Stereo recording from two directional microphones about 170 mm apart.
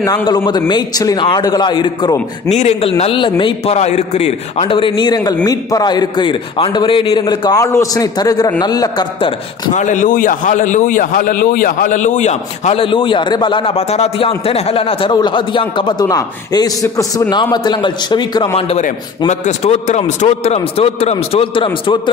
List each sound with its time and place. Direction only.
0.0 s a man's voice: 25° left (ahead or behind)
2.5 s a man's voice: 40° left (ahead or behind); by 9.3 s 25° left (ahead or behind)
9.8 s a man's voice: 50° left (ahead or behind); by 18.5 s 25° left (ahead or behind)
18.7 s a man's voice: 45° left (ahead or behind)